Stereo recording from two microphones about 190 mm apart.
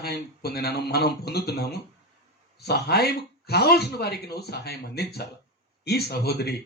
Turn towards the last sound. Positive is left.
turn(degrees=55)  # may be behind; listen again after turning